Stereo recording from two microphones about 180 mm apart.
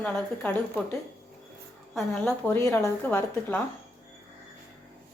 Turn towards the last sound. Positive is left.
turn(degrees=10)  # may be behind; listen again after turning